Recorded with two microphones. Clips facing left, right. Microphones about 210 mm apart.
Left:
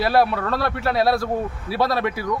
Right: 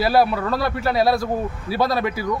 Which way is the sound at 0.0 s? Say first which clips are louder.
Right 1 dB; centre (ahead or behind).